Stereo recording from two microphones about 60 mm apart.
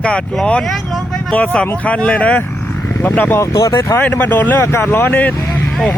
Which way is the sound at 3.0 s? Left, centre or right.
Left.